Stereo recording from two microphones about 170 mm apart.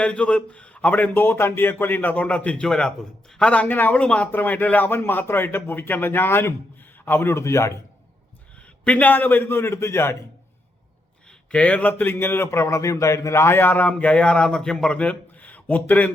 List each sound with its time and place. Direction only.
0.0 s a man's voice: 5° left (ahead or behind)
8.8 s a man's voice: 10° left (ahead or behind)
11.3 s a man's voice: 5° left (ahead or behind)